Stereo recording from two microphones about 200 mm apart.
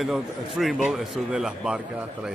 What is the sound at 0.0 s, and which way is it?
Speech, centre (ahead or behind).